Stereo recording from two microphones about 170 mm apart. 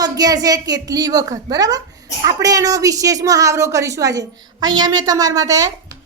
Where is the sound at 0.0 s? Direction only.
20° right (ahead or behind).